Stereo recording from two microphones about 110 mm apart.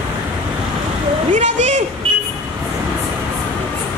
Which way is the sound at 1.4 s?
90° right.